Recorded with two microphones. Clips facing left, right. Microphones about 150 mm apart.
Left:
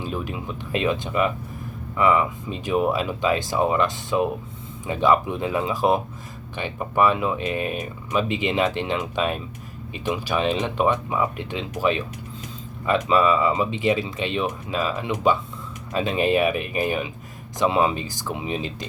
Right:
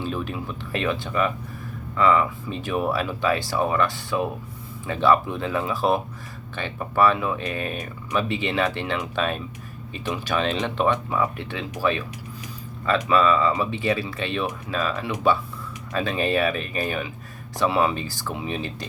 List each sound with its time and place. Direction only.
0.0 s speech: 15° left (ahead or behind)